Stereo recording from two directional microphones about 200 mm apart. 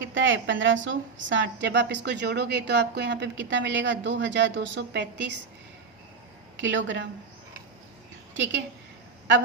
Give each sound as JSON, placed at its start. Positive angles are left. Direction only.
{"t": 0.0, "sound": "a woman's voice", "side_deg": -70}
{"t": 6.6, "sound": "speech", "side_deg": -70}
{"t": 8.3, "sound": "a woman's voice", "side_deg": -65}